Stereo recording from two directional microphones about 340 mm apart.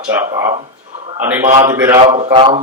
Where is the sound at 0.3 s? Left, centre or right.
Centre.